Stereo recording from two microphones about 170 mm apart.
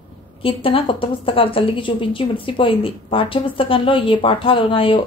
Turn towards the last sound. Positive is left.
turn(degrees=30)  # may be behind; listen again after turning